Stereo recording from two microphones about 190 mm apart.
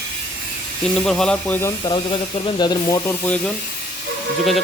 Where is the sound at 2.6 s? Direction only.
20° left (ahead or behind).